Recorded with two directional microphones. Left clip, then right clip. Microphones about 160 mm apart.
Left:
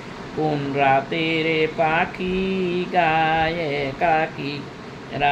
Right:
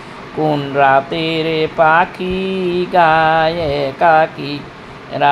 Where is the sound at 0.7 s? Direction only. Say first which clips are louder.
Right 7 dB; 30° right (ahead or behind).